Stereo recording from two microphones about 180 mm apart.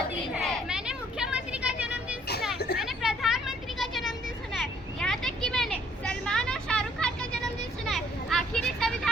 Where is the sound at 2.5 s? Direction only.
65° left (ahead or behind).